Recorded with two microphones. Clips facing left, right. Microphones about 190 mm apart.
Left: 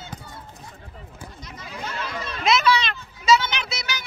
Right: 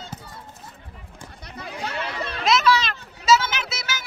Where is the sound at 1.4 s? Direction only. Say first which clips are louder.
Right 3 dB; 65° right (ahead or behind).